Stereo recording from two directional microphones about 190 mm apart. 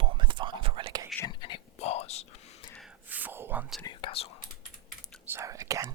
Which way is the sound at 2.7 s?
5° right (ahead or behind).